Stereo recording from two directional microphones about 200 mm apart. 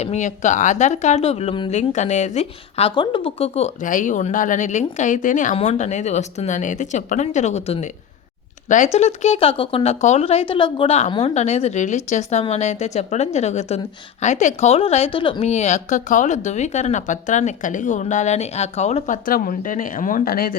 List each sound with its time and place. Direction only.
0.0 s speech: 35° left (ahead or behind)